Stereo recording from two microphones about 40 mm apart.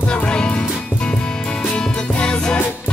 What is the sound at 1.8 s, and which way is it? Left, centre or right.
Music, centre.